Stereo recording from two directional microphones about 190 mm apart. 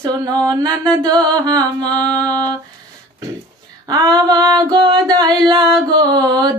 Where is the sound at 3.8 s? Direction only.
20° right (ahead or behind).